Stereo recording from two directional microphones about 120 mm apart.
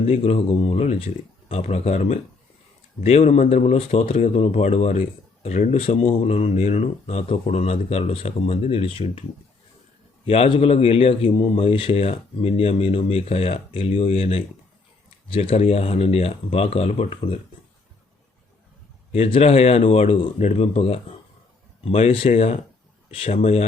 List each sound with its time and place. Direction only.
0.0 s speech: 60° left (ahead or behind)
5.8 s speech: 55° left (ahead or behind)
10.2 s speech: 55° left (ahead or behind)
19.1 s speech: 55° left (ahead or behind)